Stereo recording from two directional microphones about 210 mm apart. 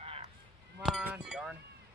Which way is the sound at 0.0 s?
30° right (ahead or behind).